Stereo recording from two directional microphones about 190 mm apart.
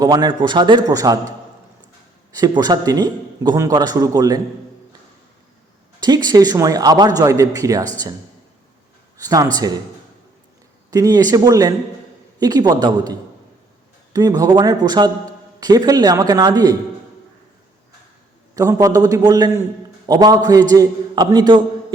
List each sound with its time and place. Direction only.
0.0 s a man's voice: 20° right (ahead or behind)
2.3 s a man's voice: 20° right (ahead or behind)
6.0 s a man's voice: 20° right (ahead or behind)
9.1 s a man's voice: 20° right (ahead or behind)
10.9 s a man's voice: 20° right (ahead or behind)
18.5 s a man's voice: 15° right (ahead or behind)